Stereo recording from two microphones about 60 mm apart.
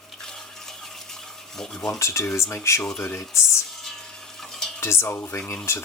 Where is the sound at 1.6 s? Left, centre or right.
Centre.